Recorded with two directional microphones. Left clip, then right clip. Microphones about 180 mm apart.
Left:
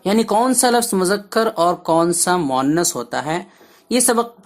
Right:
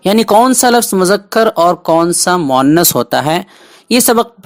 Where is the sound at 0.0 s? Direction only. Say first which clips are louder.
Right 8 dB; 40° right (ahead or behind).